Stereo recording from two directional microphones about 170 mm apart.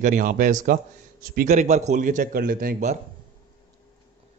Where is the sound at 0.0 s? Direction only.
50° right (ahead or behind).